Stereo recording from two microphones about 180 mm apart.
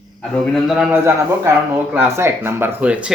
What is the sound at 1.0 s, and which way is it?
A man's voice, 10° right (ahead or behind).